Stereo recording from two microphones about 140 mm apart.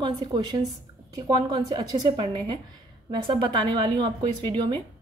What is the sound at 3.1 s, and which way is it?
Speech, 40° right (ahead or behind).